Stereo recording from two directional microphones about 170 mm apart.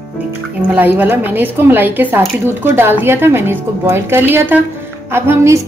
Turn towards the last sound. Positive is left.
turn(degrees=-15)  # may be behind; listen again after turning